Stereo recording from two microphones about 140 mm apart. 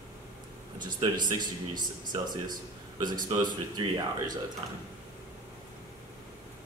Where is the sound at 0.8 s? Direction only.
35° right (ahead or behind).